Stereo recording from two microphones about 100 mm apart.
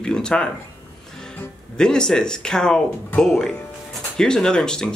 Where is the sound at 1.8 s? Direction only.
5° left (ahead or behind).